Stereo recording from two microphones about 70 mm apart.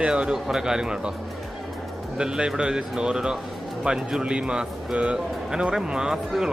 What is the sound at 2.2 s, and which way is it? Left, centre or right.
Speech, centre.